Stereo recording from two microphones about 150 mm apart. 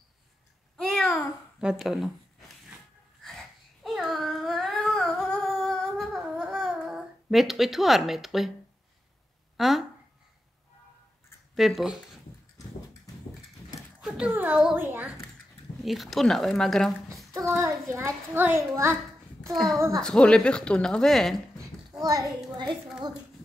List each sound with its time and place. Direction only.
0.7 s babbling: 5° left (ahead or behind)
1.6 s speech: 5° right (ahead or behind)
3.8 s a sound: centre (ahead or behind)
9.6 s speech: centre (ahead or behind)
11.5 s speech: centre (ahead or behind)
14.0 s a child's voice: 5° right (ahead or behind)
15.8 s speech: centre (ahead or behind)
17.3 s a child's voice: 20° right (ahead or behind)
19.5 s speech: centre (ahead or behind)
22.0 s a child's voice: 25° right (ahead or behind)
22.7 s speech: centre (ahead or behind)